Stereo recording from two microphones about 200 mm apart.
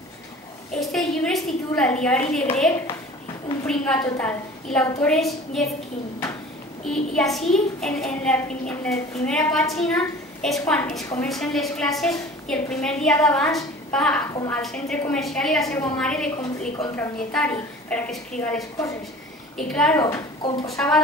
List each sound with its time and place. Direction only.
0.7 s a woman's voice: centre (ahead or behind)
3.6 s a woman's voice: 5° left (ahead or behind)
6.8 s a woman's voice: 5° left (ahead or behind)
20.0 s a woman's voice: 15° left (ahead or behind)
20.6 s a woman's voice: 5° left (ahead or behind)